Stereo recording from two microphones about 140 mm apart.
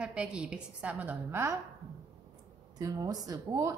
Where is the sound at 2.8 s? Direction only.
25° right (ahead or behind).